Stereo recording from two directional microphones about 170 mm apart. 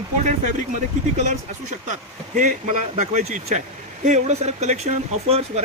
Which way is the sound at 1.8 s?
50° right (ahead or behind).